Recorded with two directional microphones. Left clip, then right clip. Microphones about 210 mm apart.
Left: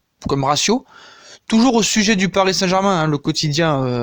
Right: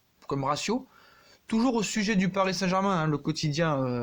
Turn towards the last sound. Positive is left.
turn(degrees=45)  # may be behind; listen again after turning